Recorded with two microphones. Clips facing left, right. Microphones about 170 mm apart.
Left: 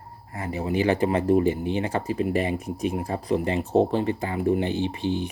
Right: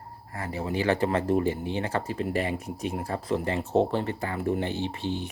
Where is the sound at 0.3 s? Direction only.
15° left (ahead or behind).